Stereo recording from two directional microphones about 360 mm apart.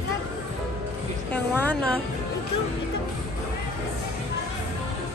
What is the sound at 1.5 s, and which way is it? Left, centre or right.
Speech, centre.